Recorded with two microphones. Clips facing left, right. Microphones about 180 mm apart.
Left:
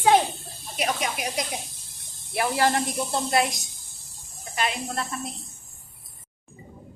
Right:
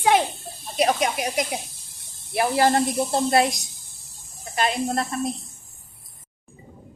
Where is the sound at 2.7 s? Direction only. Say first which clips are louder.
Right 5 dB; 35° right (ahead or behind).